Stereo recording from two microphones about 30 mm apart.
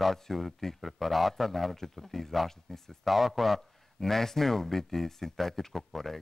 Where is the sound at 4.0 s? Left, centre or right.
Centre.